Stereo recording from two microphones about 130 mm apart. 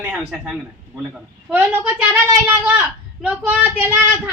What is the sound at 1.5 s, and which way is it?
Speech, 10° right (ahead or behind).